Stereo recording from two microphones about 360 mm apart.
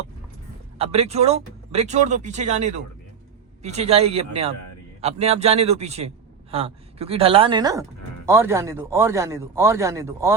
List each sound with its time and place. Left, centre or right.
0.8 s speech: centre